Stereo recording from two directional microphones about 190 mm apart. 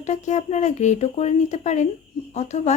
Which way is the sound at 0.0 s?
35° left (ahead or behind).